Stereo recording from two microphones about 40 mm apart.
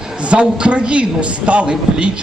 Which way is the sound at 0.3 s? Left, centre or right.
Right.